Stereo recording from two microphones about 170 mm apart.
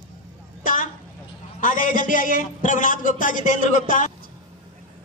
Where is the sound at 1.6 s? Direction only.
50° left (ahead or behind).